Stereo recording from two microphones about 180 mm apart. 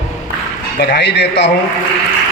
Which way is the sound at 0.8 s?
65° left (ahead or behind).